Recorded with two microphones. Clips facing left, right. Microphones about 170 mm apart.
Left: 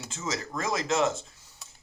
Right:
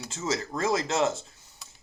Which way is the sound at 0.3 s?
25° right (ahead or behind).